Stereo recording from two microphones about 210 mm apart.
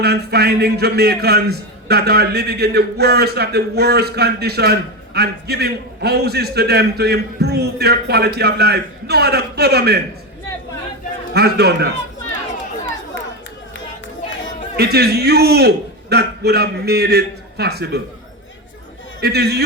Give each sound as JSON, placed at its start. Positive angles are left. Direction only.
{"t": 0.0, "sound": "a man's voice", "side_deg": -50}
{"t": 11.3, "sound": "a man's voice", "side_deg": -50}
{"t": 14.8, "sound": "a man's voice", "side_deg": -50}
{"t": 19.2, "sound": "a man's voice", "side_deg": -50}